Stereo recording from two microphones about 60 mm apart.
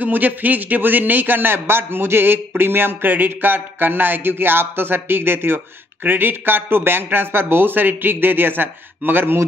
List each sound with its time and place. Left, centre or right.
0.0 s a man's voice: right